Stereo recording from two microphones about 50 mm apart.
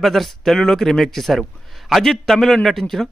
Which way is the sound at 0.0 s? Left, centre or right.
Centre.